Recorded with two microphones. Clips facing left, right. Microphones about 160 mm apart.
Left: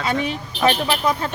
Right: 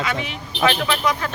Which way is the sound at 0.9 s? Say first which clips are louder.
Left 1 dB; 30° left (ahead or behind).